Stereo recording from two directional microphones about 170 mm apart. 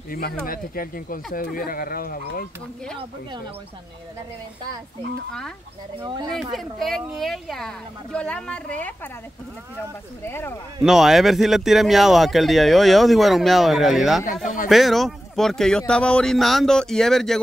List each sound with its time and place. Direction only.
0.1 s speech: 60° left (ahead or behind)
5.9 s speech: 30° right (ahead or behind)
6.5 s speech: centre (ahead or behind)
10.2 s speech: 15° left (ahead or behind)
10.8 s speech: centre (ahead or behind)
14.2 s speech: 50° left (ahead or behind)
14.7 s speech: centre (ahead or behind)